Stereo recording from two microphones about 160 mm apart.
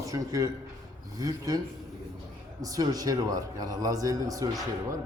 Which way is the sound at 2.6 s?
20° right (ahead or behind).